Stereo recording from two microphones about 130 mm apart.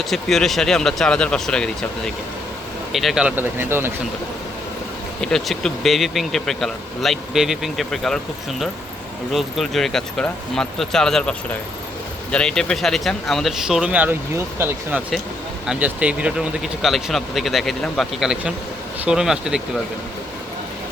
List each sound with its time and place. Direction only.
0.0 s speech: centre (ahead or behind)
2.9 s speech: centre (ahead or behind)
3.3 s speech: 15° right (ahead or behind)
5.2 s speech: 5° left (ahead or behind)
9.3 s speech: centre (ahead or behind)